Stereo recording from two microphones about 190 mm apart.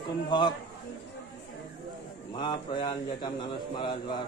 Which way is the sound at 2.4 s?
25° left (ahead or behind).